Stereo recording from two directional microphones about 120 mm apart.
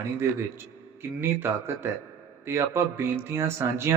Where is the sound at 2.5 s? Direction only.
20° right (ahead or behind).